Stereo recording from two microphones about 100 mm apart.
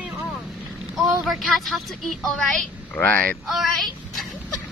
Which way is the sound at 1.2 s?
Centre (ahead or behind).